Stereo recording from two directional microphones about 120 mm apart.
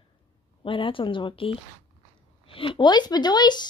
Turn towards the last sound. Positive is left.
turn(degrees=35)  # may be behind; listen again after turning